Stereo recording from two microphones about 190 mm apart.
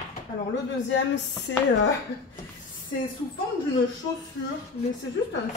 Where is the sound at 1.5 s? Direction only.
90° left.